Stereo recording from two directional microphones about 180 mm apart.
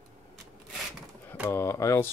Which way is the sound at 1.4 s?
15° left (ahead or behind).